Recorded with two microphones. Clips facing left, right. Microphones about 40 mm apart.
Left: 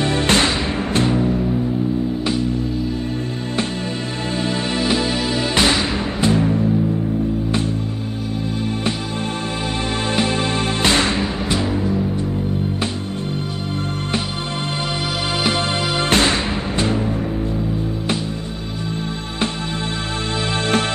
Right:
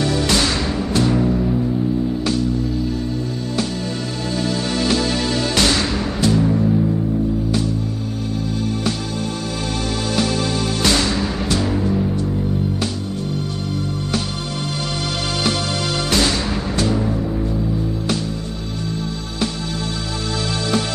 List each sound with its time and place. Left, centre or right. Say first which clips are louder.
0.0 s music: left 1 dB; left
1.1 s music: right 1 dB; centre
4.4 s music: even; left
10.1 s music: even; left
11.7 s music: right 1 dB; centre
15.4 s music: left 1 dB; left
16.1 s music: left 2 dB; left